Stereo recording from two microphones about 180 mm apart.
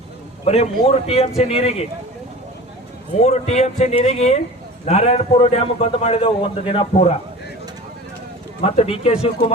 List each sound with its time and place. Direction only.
0.4 s a man's voice: 35° left (ahead or behind)
3.2 s a man's voice: 35° left (ahead or behind)
8.6 s a man's voice: 35° left (ahead or behind)